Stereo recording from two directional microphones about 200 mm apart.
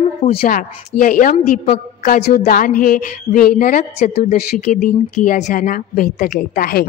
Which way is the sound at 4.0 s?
35° left (ahead or behind).